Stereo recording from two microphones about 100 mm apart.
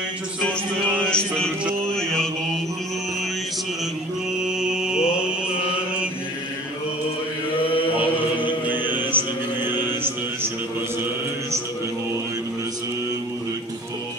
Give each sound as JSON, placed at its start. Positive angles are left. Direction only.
{"t": 1.1, "sound": "mantra", "side_deg": 5}
{"t": 4.4, "sound": "mantra", "side_deg": -5}
{"t": 8.8, "sound": "mantra", "side_deg": -20}